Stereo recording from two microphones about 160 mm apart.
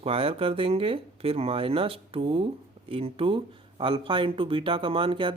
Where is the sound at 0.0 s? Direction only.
35° right (ahead or behind).